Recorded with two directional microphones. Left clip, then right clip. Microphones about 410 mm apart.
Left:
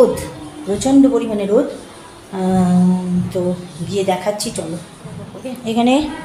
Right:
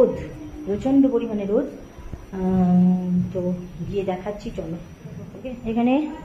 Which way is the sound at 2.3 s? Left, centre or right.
Right.